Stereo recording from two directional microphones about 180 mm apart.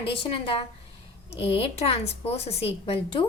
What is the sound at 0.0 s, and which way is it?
A woman's voice, 30° left (ahead or behind).